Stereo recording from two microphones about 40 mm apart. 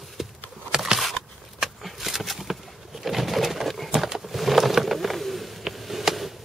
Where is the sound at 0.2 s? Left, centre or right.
Centre.